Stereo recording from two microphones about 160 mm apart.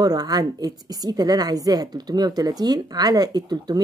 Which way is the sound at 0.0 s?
25° right (ahead or behind).